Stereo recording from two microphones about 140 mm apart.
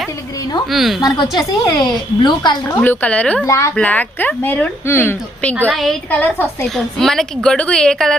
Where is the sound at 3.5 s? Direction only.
20° left (ahead or behind).